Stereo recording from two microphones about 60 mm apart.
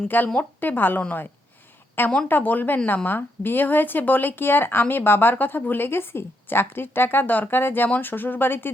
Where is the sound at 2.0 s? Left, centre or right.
Left.